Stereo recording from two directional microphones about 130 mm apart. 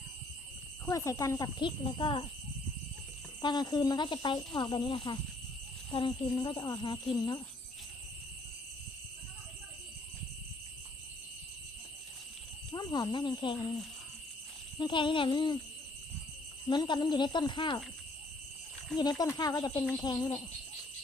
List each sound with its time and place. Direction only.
0.9 s speech: 25° left (ahead or behind); by 2.2 s 40° left (ahead or behind)
3.4 s speech: 35° left (ahead or behind)
12.7 s speech: 30° left (ahead or behind)
14.8 s speech: 35° left (ahead or behind)
16.6 s speech: 35° left (ahead or behind)
18.9 s speech: 30° left (ahead or behind)